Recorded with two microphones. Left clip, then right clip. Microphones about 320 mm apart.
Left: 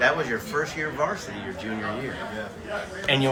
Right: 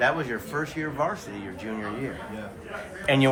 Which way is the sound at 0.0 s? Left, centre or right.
Right.